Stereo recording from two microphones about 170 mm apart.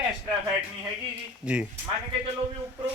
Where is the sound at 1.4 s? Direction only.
5° right (ahead or behind).